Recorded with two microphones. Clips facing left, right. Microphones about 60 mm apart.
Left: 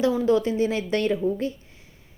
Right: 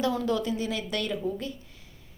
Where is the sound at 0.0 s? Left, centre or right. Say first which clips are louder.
Left 6 dB; left.